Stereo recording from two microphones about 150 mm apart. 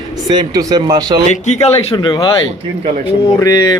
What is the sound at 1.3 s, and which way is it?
Speech, 50° left (ahead or behind).